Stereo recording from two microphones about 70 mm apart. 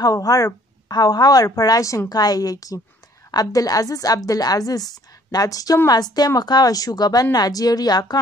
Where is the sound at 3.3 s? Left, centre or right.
Left.